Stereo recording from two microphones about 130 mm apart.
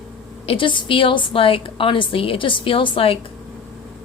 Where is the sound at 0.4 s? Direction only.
40° left (ahead or behind).